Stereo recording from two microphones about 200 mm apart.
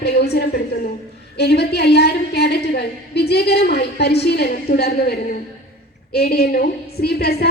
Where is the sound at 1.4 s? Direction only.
55° left (ahead or behind).